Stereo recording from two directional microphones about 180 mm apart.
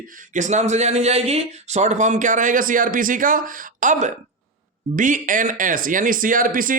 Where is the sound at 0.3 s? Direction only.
40° right (ahead or behind).